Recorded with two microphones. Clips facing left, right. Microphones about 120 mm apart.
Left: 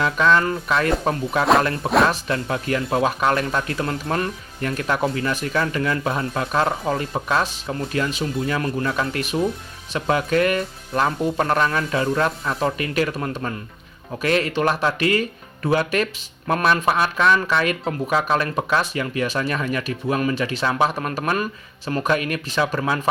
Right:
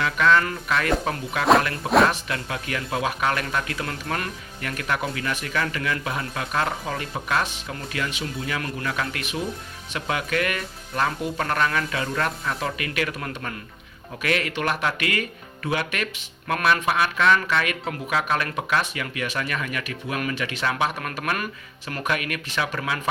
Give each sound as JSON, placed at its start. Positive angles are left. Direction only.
{"t": 0.0, "sound": "speech", "side_deg": 30}